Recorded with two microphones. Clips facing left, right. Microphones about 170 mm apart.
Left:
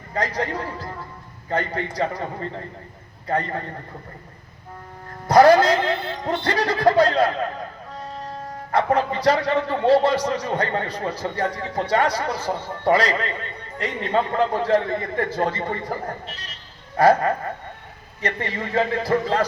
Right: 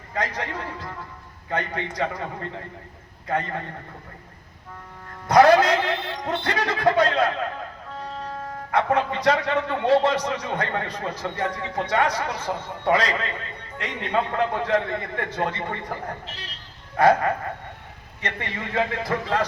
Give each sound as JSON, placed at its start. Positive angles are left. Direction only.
{"t": 0.1, "sound": "a man's voice", "side_deg": 35}
{"t": 5.3, "sound": "a man's voice", "side_deg": 30}
{"t": 8.7, "sound": "a man's voice", "side_deg": 35}
{"t": 17.0, "sound": "a man's voice", "side_deg": 30}